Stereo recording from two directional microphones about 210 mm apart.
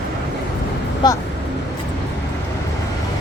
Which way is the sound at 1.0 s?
20° left (ahead or behind).